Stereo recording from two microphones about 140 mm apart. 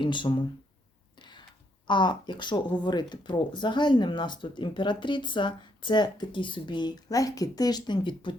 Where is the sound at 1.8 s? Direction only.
35° left (ahead or behind).